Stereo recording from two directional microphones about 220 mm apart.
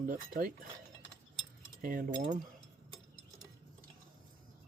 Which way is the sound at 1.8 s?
40° right (ahead or behind).